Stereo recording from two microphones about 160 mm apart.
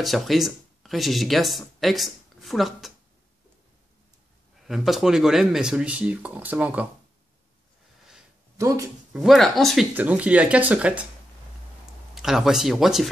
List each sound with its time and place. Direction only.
0.0 s speech: centre (ahead or behind)
4.6 s speech: centre (ahead or behind)
8.5 s speech: 20° right (ahead or behind)
9.1 s speech: centre (ahead or behind)
9.9 s speech: 10° right (ahead or behind)
12.2 s speech: 5° right (ahead or behind)